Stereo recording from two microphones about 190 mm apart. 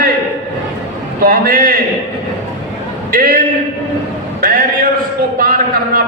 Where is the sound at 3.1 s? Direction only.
50° right (ahead or behind).